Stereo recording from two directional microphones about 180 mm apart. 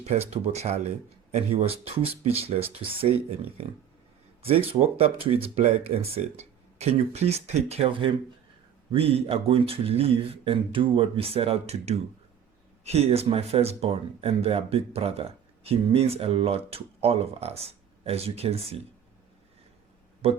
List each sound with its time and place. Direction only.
0.0 s speech: 35° right (ahead or behind)
4.4 s speech: 30° right (ahead or behind)
20.2 s speech: 35° right (ahead or behind)